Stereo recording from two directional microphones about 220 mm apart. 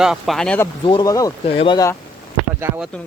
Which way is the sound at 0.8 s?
20° left (ahead or behind).